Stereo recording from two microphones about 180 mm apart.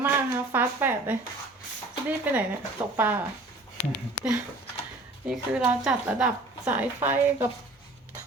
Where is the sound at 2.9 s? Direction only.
10° right (ahead or behind).